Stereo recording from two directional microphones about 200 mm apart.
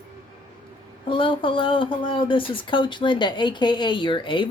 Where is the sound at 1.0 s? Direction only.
25° left (ahead or behind).